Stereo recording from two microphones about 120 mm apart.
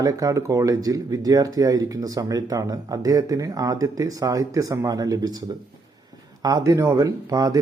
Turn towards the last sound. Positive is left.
turn(degrees=-30)  # may be behind; listen again after turning